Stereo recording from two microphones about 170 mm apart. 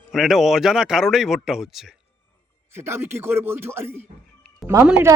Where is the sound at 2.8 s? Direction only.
15° right (ahead or behind).